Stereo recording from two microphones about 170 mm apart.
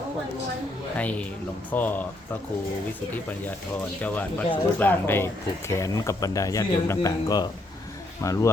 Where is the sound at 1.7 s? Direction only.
10° left (ahead or behind).